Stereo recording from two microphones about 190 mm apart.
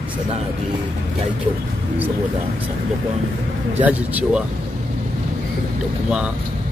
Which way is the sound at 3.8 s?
5° right (ahead or behind).